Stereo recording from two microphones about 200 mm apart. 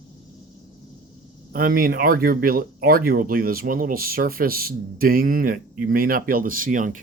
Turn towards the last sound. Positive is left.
turn(degrees=-40)  # may be behind; listen again after turning